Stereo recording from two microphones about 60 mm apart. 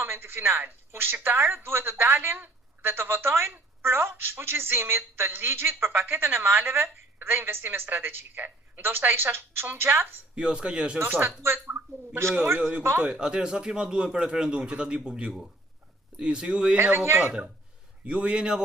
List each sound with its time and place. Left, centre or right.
0.0 s a woman's voice: right
10.3 s a man's voice: centre
11.0 s a woman's voice: right
13.1 s a man's voice: centre
16.7 s a woman's voice: right
17.0 s a woman's voice: right
17.2 s a man's voice: right